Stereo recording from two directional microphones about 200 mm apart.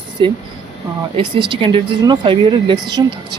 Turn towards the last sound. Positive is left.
turn(degrees=-20)  # may be behind; listen again after turning